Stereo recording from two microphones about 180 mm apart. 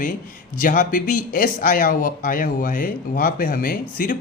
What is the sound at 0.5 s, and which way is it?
Speech, 50° left (ahead or behind).